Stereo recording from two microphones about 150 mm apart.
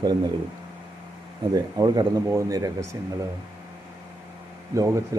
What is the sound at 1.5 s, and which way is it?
Speech, 25° right (ahead or behind).